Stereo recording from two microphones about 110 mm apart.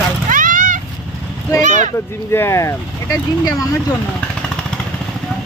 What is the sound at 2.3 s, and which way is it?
Speech, 25° left (ahead or behind).